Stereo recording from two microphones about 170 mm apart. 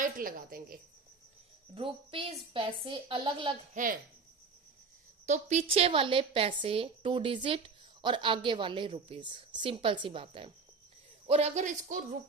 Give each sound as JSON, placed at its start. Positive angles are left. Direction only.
{"t": 0.0, "sound": "a woman's voice", "side_deg": -55}
{"t": 1.7, "sound": "a woman's voice", "side_deg": -30}
{"t": 3.8, "sound": "speech", "side_deg": -45}
{"t": 5.2, "sound": "a woman's voice", "side_deg": -45}